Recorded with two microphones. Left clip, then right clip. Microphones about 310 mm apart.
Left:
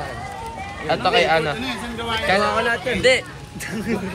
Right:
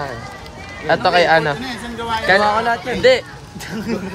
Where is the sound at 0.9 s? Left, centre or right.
Right.